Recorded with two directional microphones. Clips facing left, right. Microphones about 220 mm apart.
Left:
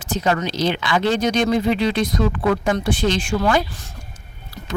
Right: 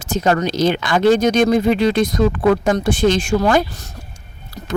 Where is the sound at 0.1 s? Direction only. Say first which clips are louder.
Right 4 dB; 45° right (ahead or behind).